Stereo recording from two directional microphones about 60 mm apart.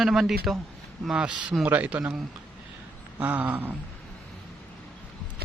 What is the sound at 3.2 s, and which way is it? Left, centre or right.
Speech, right.